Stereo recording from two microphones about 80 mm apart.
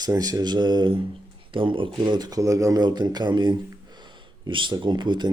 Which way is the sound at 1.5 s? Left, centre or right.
Right.